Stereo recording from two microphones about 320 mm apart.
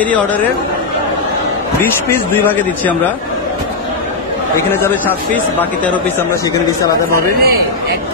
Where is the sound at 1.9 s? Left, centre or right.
Centre.